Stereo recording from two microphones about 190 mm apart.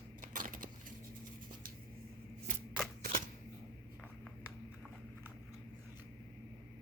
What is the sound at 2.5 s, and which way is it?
Shuffling cards, 45° right (ahead or behind).